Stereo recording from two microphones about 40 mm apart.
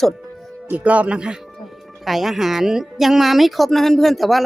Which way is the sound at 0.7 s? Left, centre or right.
Right.